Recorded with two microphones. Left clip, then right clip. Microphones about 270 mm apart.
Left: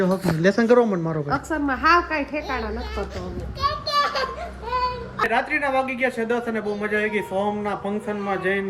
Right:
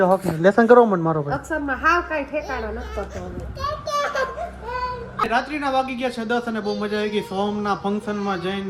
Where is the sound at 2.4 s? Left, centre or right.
Centre.